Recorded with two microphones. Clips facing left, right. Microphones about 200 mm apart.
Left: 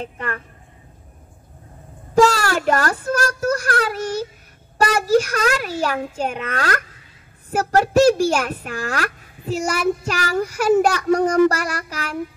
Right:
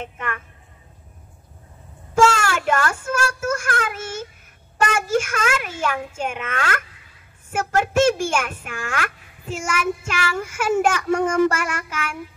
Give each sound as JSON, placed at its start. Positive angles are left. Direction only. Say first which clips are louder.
{"t": 0.0, "sound": "a child's voice", "louder": "left 2 dB", "side_deg": 35}
{"t": 2.1, "sound": "a child's voice", "louder": "left 2 dB", "side_deg": 35}